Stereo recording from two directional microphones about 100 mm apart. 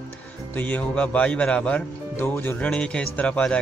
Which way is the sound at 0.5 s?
15° left (ahead or behind).